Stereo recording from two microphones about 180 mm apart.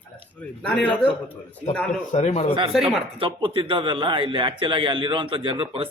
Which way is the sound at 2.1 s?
35° left (ahead or behind).